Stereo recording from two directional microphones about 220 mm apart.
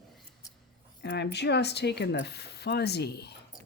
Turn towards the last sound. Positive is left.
turn(degrees=50)  # may be behind; listen again after turning